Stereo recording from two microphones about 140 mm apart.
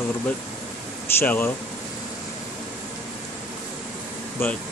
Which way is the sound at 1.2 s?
15° left (ahead or behind).